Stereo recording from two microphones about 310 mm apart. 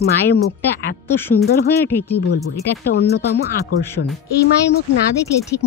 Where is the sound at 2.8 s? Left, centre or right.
Left.